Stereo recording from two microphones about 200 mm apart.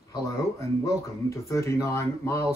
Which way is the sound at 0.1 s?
15° left (ahead or behind).